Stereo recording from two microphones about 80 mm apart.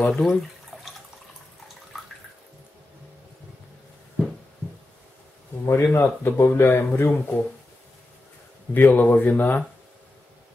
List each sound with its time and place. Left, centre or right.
0.1 s a sound: centre
5.7 s speech: left
8.7 s speech: left